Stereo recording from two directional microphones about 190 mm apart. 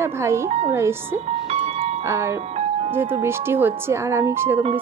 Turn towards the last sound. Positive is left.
turn(degrees=-10)  # may be behind; listen again after turning